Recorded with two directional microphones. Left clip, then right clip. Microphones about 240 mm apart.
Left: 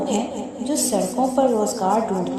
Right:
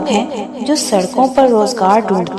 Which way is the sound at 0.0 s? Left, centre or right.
Centre.